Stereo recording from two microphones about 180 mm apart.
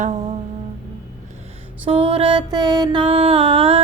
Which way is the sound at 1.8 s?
30° right (ahead or behind).